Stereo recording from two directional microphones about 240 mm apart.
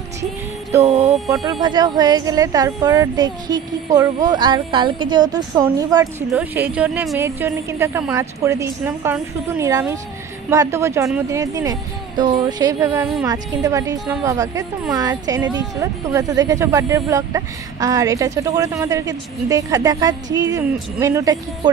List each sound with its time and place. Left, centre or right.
0.8 s music: right
1.6 s a woman's voice: centre